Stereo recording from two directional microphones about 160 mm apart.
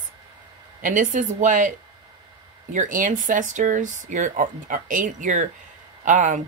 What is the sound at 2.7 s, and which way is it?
Speech, 55° right (ahead or behind).